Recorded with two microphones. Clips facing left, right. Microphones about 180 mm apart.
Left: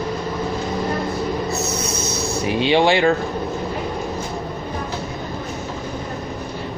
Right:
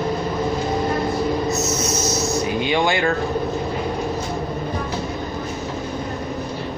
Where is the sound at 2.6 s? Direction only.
30° left (ahead or behind).